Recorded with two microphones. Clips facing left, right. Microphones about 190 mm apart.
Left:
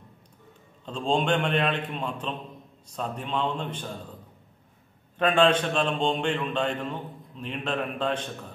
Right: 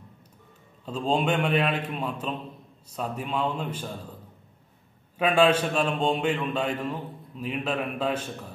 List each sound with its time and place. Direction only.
0.8 s a man's voice: 5° right (ahead or behind)
5.1 s a man's voice: 5° right (ahead or behind)